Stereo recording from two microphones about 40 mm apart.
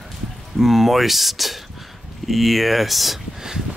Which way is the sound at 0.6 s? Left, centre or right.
Centre.